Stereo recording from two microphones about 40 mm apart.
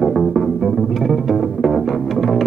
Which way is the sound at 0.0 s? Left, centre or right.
Centre.